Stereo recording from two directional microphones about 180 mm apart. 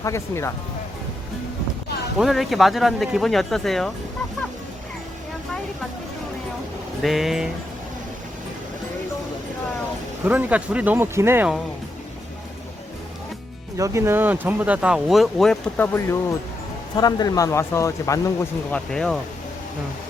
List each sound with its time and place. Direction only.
0.0 s speech: 15° left (ahead or behind)
2.1 s speech: centre (ahead or behind)
7.0 s speech: centre (ahead or behind)
10.2 s speech: 10° right (ahead or behind)
13.7 s speech: 15° right (ahead or behind); by 15.9 s centre (ahead or behind)
16.0 s speech: 15° left (ahead or behind)
18.9 s speech: 5° left (ahead or behind)